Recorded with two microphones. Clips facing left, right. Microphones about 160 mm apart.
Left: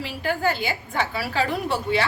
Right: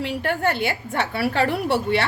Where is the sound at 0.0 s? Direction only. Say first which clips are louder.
Right 2 dB; 65° right (ahead or behind).